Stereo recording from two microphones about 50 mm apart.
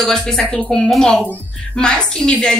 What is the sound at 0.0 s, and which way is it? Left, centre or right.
Speech, centre.